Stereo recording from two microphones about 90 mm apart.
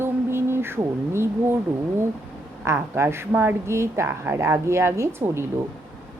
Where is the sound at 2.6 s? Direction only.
30° right (ahead or behind).